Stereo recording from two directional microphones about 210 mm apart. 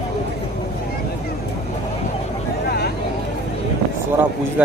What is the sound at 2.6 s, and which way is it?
Vehicle, 50° left (ahead or behind).